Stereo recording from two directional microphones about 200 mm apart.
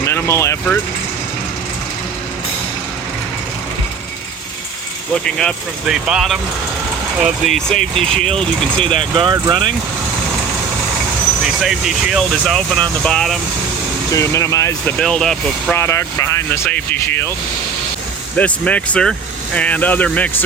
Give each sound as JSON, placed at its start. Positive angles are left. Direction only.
{"t": 0.0, "sound": "speech", "side_deg": 15}
{"t": 5.1, "sound": "speech", "side_deg": 5}
{"t": 8.9, "sound": "speech", "side_deg": -25}
{"t": 11.4, "sound": "speech", "side_deg": 0}
{"t": 14.1, "sound": "speech", "side_deg": 15}
{"t": 15.8, "sound": "speech", "side_deg": 15}
{"t": 18.3, "sound": "speech", "side_deg": 5}